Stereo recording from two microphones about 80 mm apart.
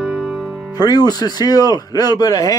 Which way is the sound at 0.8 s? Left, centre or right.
Left.